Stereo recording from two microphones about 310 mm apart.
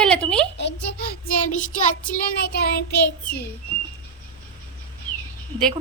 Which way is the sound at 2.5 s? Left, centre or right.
Left.